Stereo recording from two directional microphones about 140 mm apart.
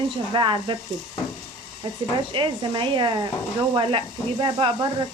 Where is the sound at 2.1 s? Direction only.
35° right (ahead or behind).